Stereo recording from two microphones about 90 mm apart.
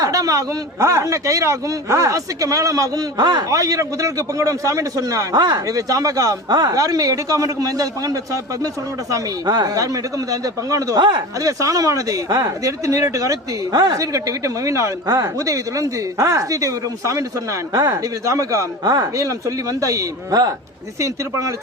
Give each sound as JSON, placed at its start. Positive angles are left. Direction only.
{"t": 0.0, "sound": "speech", "side_deg": -40}
{"t": 3.5, "sound": "speech", "side_deg": -40}